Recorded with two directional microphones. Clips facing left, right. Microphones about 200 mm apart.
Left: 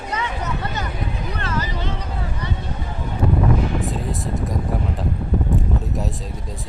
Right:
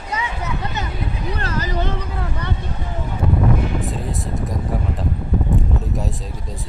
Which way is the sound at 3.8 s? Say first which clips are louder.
Left 1 dB; centre (ahead or behind).